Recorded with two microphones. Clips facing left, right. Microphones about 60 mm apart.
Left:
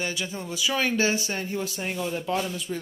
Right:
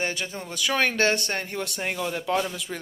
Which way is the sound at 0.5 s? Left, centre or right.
Right.